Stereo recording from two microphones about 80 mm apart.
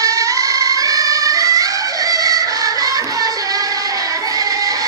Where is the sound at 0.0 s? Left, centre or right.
Right.